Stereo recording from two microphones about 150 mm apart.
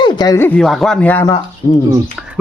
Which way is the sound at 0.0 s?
25° left (ahead or behind).